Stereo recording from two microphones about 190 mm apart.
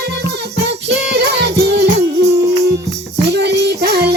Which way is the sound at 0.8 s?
60° right (ahead or behind).